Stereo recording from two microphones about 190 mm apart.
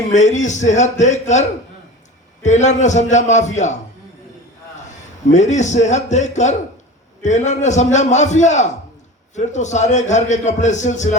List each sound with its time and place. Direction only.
0.1 s a man's voice: 40° left (ahead or behind)
5.3 s a man's voice: 40° left (ahead or behind)